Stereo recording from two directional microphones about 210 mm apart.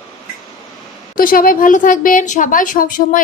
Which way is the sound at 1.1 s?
40° left (ahead or behind).